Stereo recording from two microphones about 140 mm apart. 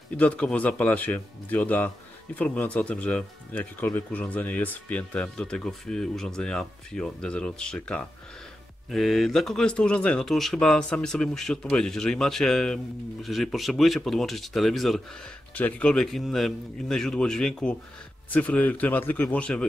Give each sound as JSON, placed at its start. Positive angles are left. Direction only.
{"t": 0.2, "sound": "speech", "side_deg": 10}